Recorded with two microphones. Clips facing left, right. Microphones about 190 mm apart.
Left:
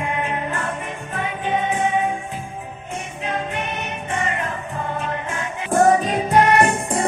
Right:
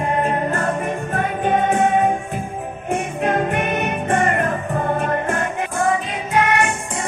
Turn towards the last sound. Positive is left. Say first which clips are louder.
# left 3 dB
turn(degrees=35)  # may be behind; listen again after turning